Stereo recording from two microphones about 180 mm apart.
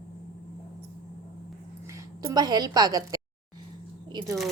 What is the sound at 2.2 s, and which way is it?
A woman's voice, 20° right (ahead or behind).